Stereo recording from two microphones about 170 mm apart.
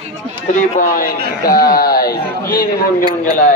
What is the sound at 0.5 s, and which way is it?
Speech, 50° left (ahead or behind).